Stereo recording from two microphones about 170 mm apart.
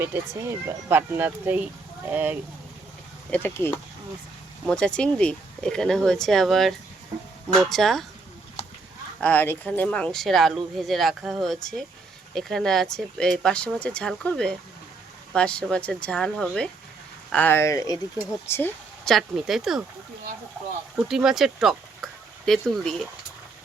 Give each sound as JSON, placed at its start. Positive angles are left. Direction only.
{"t": 0.0, "sound": "speech", "side_deg": -15}
{"t": 3.2, "sound": "speech", "side_deg": 10}
{"t": 9.2, "sound": "speech", "side_deg": 10}
{"t": 19.0, "sound": "speech", "side_deg": 0}
{"t": 20.9, "sound": "speech", "side_deg": -5}